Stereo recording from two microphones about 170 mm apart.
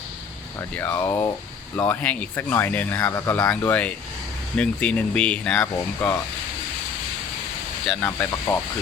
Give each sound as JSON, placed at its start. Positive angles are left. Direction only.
{"t": 0.8, "sound": "speech", "side_deg": 15}
{"t": 7.9, "sound": "speech", "side_deg": 10}